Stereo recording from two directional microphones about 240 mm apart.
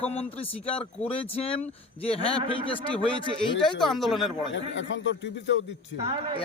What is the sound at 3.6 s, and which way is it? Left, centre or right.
Speech, centre.